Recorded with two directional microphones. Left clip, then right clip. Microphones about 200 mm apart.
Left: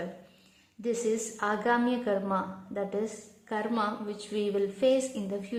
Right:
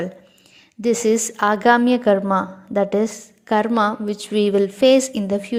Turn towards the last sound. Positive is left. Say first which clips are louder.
# right 12 dB
turn(degrees=-40)  # may be behind; listen again after turning